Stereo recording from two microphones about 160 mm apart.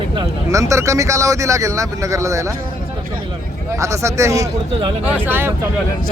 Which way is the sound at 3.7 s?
20° right (ahead or behind).